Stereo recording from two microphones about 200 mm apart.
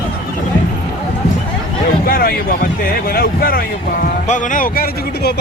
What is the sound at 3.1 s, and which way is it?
Speech, 45° left (ahead or behind).